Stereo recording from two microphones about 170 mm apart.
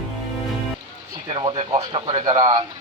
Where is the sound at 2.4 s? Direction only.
25° right (ahead or behind).